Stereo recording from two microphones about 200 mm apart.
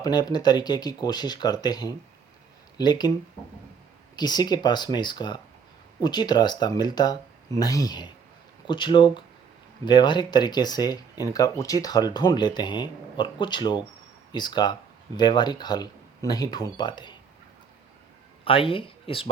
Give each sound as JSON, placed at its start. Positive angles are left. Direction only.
{"t": 0.0, "sound": "speech", "side_deg": 20}
{"t": 4.1, "sound": "speech", "side_deg": 20}
{"t": 18.4, "sound": "speech", "side_deg": 25}